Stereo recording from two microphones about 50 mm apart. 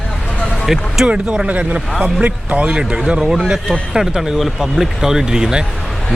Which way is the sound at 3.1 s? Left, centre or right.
Centre.